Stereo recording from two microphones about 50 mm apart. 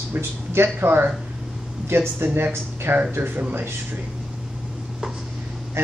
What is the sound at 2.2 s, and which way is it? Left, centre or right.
Speech, right.